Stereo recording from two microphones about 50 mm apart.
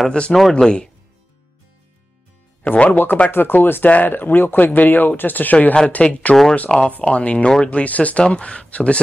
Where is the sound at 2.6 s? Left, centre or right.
Left.